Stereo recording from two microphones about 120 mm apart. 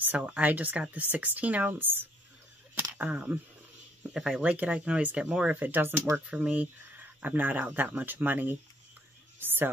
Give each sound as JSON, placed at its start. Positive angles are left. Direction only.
{"t": 0.0, "sound": "speech", "side_deg": -15}
{"t": 2.7, "sound": "a sound", "side_deg": -15}
{"t": 4.1, "sound": "speech", "side_deg": -5}